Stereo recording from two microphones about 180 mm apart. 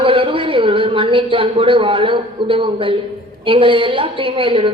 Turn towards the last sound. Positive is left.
turn(degrees=-30)  # may be behind; listen again after turning